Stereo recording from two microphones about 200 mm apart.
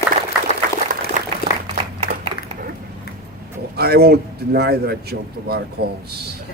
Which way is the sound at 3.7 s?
50° right (ahead or behind).